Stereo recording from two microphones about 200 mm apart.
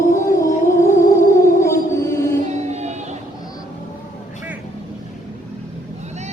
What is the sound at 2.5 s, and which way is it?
Music, 35° right (ahead or behind).